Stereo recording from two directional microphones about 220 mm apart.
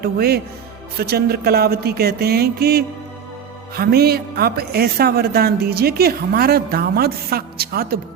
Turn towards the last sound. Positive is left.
turn(degrees=-45)  # may be behind; listen again after turning